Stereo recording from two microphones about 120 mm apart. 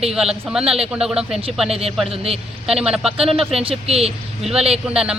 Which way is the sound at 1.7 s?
55° right (ahead or behind).